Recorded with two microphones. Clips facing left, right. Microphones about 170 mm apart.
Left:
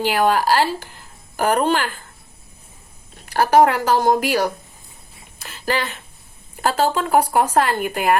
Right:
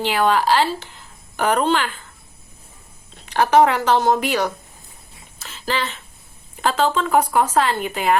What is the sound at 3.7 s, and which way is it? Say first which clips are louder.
Speech: even; 10° left (ahead or behind).